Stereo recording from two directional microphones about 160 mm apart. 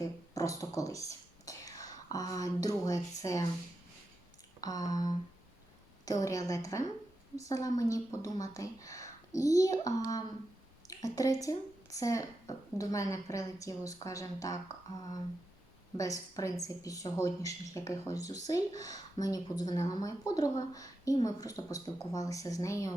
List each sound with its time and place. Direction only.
0.0 s speech: 20° left (ahead or behind)
4.6 s speech: 25° left (ahead or behind)